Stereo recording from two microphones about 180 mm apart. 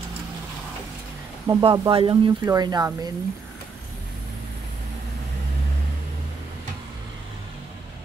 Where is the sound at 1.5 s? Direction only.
20° right (ahead or behind).